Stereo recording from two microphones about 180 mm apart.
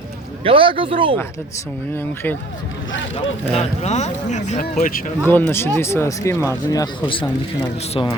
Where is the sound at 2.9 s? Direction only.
90° left.